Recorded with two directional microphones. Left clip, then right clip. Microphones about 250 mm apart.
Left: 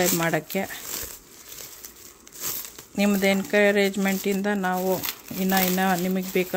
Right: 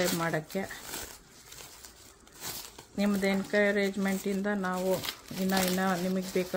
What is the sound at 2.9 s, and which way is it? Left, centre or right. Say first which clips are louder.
Speech: left 8 dB; left.